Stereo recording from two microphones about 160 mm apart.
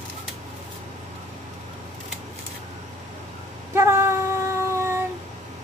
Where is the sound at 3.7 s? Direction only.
15° right (ahead or behind).